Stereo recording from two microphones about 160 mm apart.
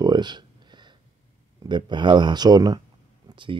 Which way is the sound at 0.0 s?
25° right (ahead or behind).